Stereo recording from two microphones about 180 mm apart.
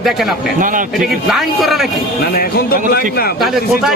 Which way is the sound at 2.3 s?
55° left (ahead or behind).